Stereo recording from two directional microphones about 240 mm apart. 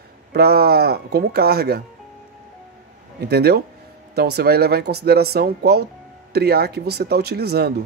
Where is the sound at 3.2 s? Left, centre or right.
Right.